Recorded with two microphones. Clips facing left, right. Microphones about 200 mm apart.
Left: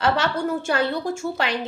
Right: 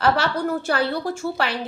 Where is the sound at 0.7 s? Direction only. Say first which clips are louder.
Even; 20° left (ahead or behind).